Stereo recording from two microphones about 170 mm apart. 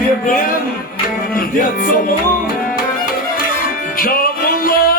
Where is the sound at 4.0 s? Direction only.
55° left (ahead or behind).